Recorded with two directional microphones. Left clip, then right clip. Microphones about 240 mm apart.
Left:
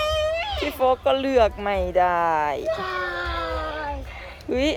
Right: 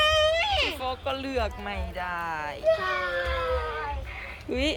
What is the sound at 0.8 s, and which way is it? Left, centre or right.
Speech, centre.